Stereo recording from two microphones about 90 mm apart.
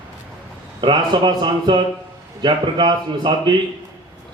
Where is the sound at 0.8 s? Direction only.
60° right (ahead or behind).